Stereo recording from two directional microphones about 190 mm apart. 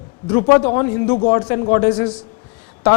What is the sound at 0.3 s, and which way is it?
Speech, 15° left (ahead or behind).